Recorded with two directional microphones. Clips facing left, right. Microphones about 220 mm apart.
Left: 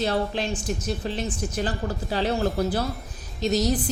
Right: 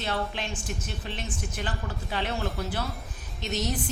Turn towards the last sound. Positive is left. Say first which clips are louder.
# left 8 dB
turn(degrees=35)  # may be behind; listen again after turning